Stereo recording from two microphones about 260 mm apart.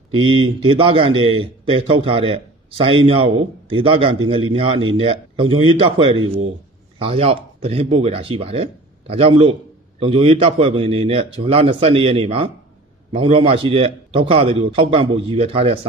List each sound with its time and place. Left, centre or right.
0.1 s a man's voice: centre